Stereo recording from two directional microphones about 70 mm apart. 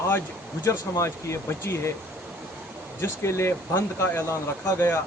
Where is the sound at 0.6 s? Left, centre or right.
Left.